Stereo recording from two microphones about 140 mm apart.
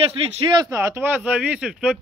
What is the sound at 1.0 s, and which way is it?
Speech, 10° right (ahead or behind).